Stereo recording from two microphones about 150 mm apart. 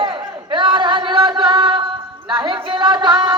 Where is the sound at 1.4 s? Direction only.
30° right (ahead or behind).